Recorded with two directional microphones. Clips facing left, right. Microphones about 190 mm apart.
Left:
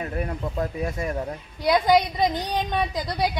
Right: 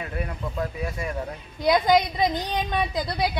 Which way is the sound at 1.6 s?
10° left (ahead or behind).